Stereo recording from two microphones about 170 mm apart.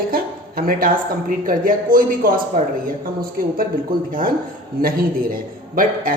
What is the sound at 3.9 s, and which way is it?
A woman's voice, 60° right (ahead or behind).